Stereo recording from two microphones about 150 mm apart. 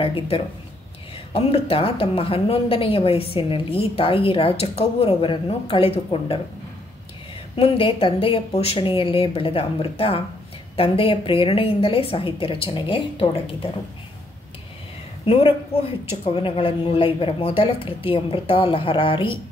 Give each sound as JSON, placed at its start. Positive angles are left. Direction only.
{"t": 0.0, "sound": "a woman's voice", "side_deg": 40}
{"t": 7.5, "sound": "a woman's voice", "side_deg": 40}
{"t": 15.2, "sound": "a woman's voice", "side_deg": 40}